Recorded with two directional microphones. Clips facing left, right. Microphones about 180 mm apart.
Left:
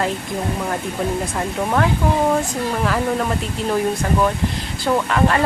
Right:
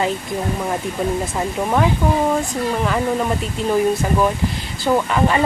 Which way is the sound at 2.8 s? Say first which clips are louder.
Left 1 dB; centre (ahead or behind).